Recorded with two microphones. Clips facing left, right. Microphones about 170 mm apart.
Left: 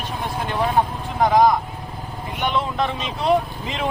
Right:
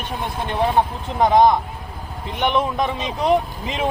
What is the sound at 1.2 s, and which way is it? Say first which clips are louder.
Speech: right 2 dB; 25° right (ahead or behind).